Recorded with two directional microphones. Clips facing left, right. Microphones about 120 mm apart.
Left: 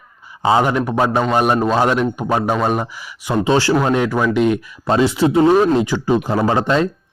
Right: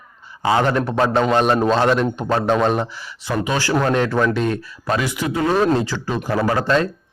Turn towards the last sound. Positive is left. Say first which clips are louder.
# left 2 dB
turn(degrees=15)  # may be behind; listen again after turning